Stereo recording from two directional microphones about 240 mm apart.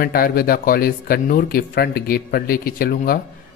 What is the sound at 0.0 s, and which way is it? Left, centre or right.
Speech, left.